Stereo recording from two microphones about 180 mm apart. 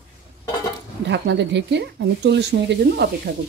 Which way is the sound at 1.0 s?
75° right (ahead or behind).